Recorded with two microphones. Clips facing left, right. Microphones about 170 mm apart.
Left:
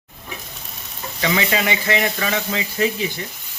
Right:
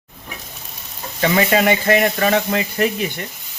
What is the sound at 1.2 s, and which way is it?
Speech, 45° right (ahead or behind).